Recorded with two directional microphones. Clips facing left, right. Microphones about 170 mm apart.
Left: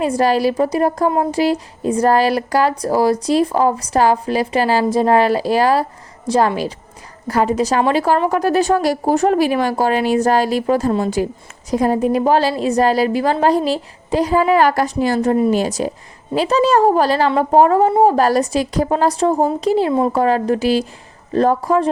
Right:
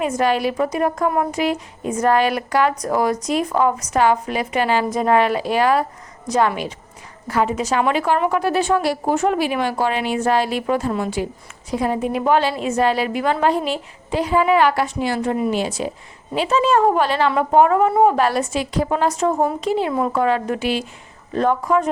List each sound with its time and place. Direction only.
0.0 s a woman's voice: 35° left (ahead or behind)